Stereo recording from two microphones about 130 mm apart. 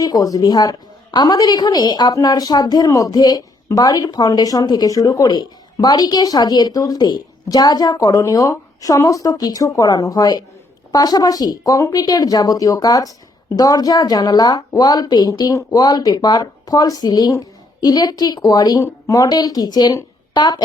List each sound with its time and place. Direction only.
0.0 s a woman's voice: 25° left (ahead or behind)